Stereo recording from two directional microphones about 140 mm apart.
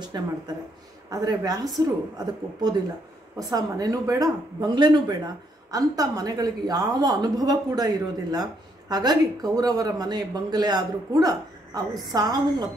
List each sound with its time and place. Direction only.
0.1 s a woman's voice: 25° right (ahead or behind)